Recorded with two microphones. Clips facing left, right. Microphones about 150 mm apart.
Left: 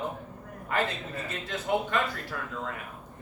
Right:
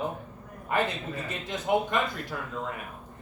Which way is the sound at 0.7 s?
15° right (ahead or behind).